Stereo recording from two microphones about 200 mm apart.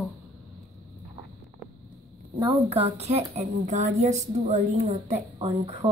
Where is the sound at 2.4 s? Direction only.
30° right (ahead or behind).